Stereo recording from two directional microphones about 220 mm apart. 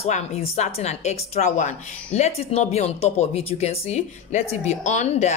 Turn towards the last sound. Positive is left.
turn(degrees=30)  # may be behind; listen again after turning